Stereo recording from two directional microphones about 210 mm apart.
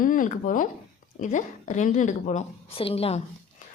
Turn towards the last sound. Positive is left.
turn(degrees=30)  # may be behind; listen again after turning